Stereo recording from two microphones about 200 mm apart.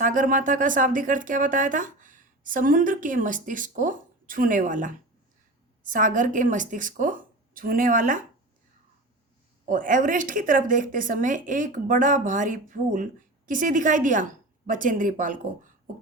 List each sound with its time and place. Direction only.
0.0 s speech: 40° right (ahead or behind)
9.6 s speech: 40° right (ahead or behind)